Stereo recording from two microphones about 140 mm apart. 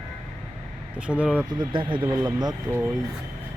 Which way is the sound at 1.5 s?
30° right (ahead or behind).